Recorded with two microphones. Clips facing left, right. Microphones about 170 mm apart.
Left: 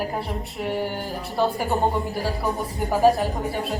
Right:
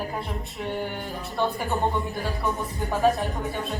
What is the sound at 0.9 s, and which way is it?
Music, 35° left (ahead or behind).